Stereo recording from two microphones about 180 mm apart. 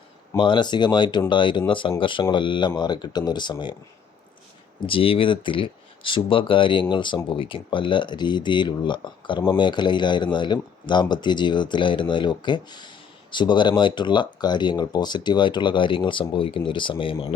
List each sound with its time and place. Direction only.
0.3 s speech: 25° left (ahead or behind)
4.9 s speech: 30° left (ahead or behind)